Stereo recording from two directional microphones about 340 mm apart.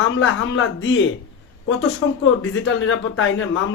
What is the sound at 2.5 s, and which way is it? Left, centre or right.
Speech, left.